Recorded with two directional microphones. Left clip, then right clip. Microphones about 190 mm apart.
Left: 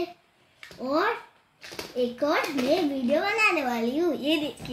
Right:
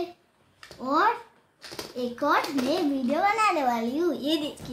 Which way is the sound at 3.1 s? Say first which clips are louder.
Even; 15° right (ahead or behind).